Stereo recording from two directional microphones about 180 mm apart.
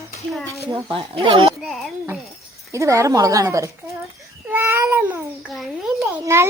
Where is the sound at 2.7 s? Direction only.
15° right (ahead or behind).